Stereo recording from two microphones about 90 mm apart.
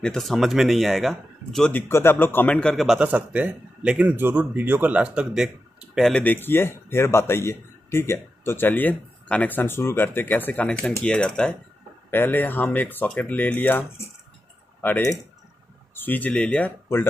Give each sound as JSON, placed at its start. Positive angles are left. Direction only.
{"t": 0.0, "sound": "a man's voice", "side_deg": 5}
{"t": 1.7, "sound": "speech", "side_deg": 25}
{"t": 2.5, "sound": "a man's voice", "side_deg": 5}
{"t": 3.0, "sound": "speech", "side_deg": -15}
{"t": 6.2, "sound": "speech", "side_deg": 25}
{"t": 12.1, "sound": "speech", "side_deg": 25}
{"t": 15.9, "sound": "speech", "side_deg": 20}